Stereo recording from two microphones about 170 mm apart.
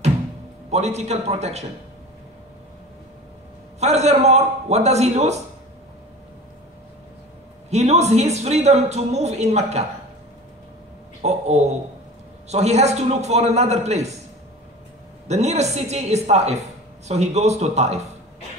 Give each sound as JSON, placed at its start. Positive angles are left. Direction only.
{"t": 0.7, "sound": "speech", "side_deg": -40}
{"t": 3.8, "sound": "speech", "side_deg": -40}
{"t": 7.7, "sound": "speech", "side_deg": -40}
{"t": 11.2, "sound": "speech", "side_deg": -40}
{"t": 15.2, "sound": "speech", "side_deg": -40}